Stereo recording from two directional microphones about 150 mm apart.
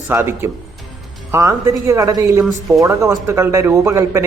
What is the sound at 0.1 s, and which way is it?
Speech, 15° right (ahead or behind).